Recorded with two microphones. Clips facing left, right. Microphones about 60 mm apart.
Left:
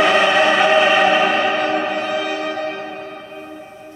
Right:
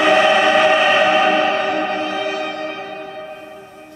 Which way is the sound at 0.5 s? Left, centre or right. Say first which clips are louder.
Even; centre.